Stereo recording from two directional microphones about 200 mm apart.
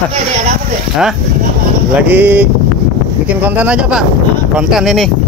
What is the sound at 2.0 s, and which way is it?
Speech, 10° right (ahead or behind).